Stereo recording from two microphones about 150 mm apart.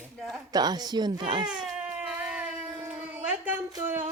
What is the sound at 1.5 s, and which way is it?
Baby cry, 5° right (ahead or behind).